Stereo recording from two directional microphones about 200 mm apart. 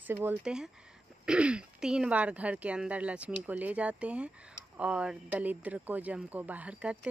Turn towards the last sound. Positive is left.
turn(degrees=-5)  # may be behind; listen again after turning